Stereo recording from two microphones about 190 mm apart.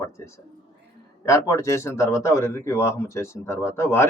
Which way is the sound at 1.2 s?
15° left (ahead or behind).